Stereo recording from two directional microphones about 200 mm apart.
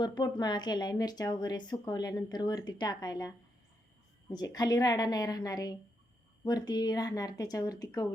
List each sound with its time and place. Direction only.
0.0 s speech: 20° left (ahead or behind)
4.4 s speech: 20° left (ahead or behind)